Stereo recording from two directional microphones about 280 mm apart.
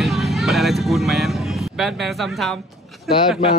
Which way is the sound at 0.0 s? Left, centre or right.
Centre.